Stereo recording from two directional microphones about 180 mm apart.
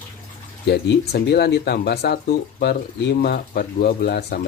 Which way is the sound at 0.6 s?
65° left (ahead or behind).